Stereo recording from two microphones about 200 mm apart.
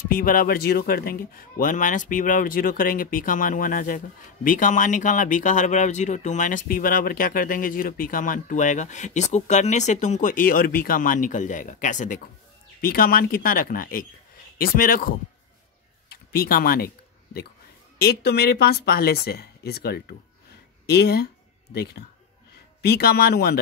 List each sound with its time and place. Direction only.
0.1 s speech: 45° left (ahead or behind)
16.1 s a sound: 50° left (ahead or behind)
17.9 s speech: 50° left (ahead or behind)